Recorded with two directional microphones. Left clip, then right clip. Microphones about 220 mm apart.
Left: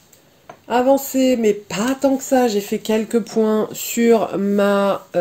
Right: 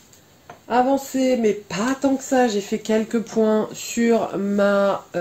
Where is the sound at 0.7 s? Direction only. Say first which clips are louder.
Left 3 dB; 45° left (ahead or behind).